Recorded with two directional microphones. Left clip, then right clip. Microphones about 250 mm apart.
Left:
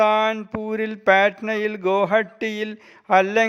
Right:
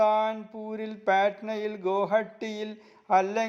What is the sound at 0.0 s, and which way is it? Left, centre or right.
Speech, left.